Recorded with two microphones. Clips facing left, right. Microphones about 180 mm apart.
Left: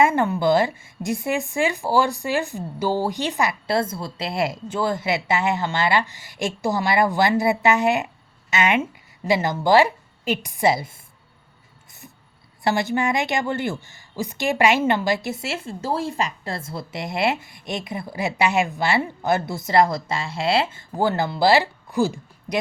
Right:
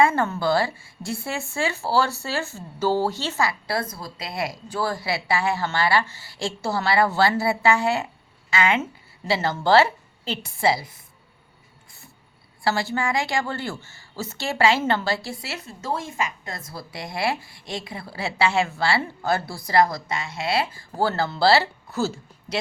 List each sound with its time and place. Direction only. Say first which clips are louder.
0.0 s a woman's voice: left 2 dB; 15° left (ahead or behind)
12.6 s a woman's voice: left 3 dB; 20° left (ahead or behind)